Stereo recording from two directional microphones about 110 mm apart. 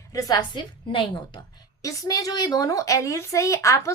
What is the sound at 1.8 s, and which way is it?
A woman's voice, 35° left (ahead or behind).